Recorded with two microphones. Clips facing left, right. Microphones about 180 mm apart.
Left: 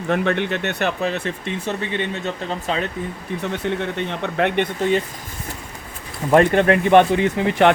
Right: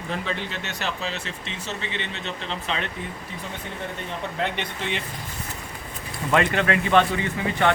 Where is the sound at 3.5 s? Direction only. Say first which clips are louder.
Left 10 dB; 75° left (ahead or behind); by 5.0 s 45° left (ahead or behind).